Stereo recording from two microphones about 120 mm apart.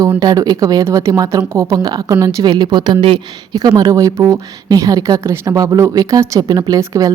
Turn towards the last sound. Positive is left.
turn(degrees=-30)  # may be behind; listen again after turning